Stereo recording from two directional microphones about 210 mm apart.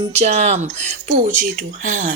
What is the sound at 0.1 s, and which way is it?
Speech, 30° right (ahead or behind).